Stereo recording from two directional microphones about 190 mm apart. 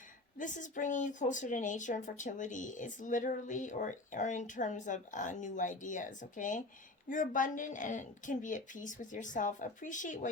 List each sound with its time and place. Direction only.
0.3 s a woman's voice: 40° left (ahead or behind)